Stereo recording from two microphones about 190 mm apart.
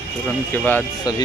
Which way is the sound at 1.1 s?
20° left (ahead or behind).